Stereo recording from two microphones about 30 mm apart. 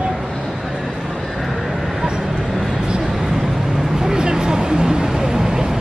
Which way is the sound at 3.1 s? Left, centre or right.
Centre.